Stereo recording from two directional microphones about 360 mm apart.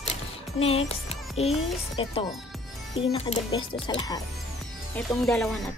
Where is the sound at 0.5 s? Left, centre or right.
Centre.